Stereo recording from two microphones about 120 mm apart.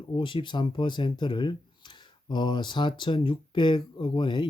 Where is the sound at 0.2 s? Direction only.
40° left (ahead or behind).